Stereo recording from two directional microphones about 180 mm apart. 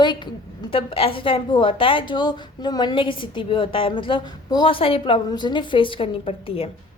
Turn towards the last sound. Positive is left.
turn(degrees=30)  # may be behind; listen again after turning